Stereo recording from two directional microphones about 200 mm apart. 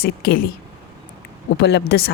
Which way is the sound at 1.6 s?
60° left (ahead or behind).